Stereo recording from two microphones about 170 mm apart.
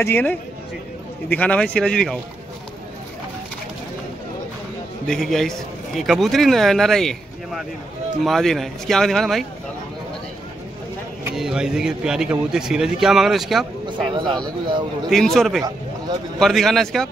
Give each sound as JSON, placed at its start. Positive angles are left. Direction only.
{"t": 0.0, "sound": "speech", "side_deg": 10}
{"t": 5.0, "sound": "speech", "side_deg": 0}
{"t": 11.3, "sound": "speech", "side_deg": -5}
{"t": 14.1, "sound": "speech", "side_deg": -25}
{"t": 15.0, "sound": "speech", "side_deg": 0}